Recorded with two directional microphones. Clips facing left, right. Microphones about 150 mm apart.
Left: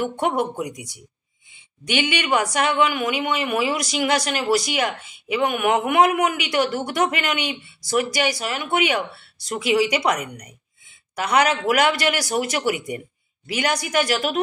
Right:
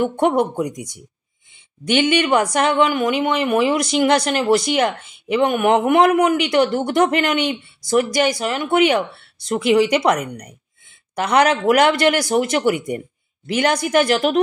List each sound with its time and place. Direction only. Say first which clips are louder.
0.0 s a woman's voice: right 5 dB; 45° right (ahead or behind)
1.9 s a woman's voice: right 6 dB; 45° right (ahead or behind)